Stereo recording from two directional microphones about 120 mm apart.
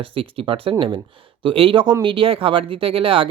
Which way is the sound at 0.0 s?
50° right (ahead or behind).